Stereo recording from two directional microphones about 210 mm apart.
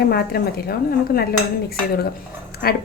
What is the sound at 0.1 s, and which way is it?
A woman's voice, 45° left (ahead or behind).